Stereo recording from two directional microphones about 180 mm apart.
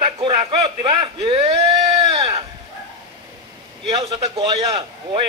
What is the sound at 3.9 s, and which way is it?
Speech, 35° right (ahead or behind).